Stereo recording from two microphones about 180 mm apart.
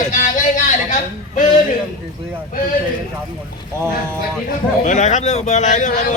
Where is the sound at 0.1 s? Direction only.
45° left (ahead or behind).